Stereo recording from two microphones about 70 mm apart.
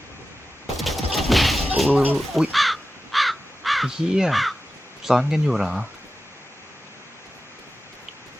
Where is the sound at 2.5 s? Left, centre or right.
Centre.